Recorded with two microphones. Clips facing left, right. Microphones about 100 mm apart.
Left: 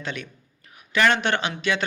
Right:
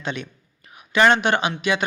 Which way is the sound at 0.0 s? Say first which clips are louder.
Right 3 dB; 20° right (ahead or behind).